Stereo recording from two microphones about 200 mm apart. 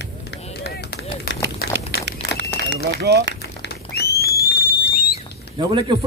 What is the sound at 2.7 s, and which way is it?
Speech, 55° right (ahead or behind).